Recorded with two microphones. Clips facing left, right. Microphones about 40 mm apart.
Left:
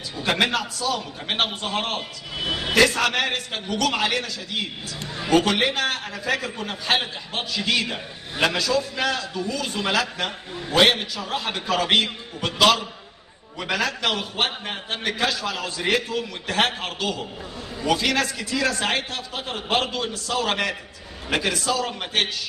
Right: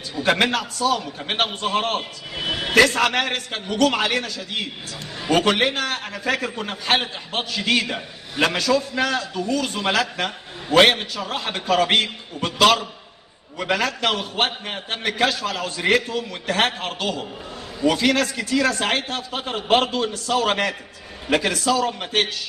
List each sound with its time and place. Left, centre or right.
0.2 s a man's voice: right
2.3 s speech: right
2.7 s a man's voice: right